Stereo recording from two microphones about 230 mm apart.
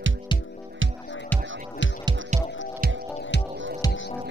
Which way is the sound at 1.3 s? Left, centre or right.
Centre.